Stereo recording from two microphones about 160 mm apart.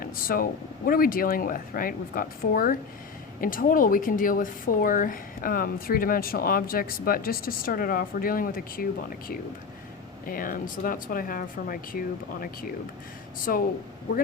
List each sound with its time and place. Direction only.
0.0 s speech: 65° left (ahead or behind)
13.5 s speech: 60° left (ahead or behind)